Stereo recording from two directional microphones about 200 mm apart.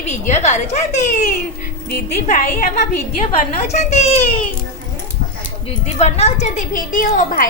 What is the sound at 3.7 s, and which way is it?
Speech, 35° left (ahead or behind).